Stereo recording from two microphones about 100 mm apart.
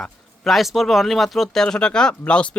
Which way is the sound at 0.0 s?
Centre (ahead or behind).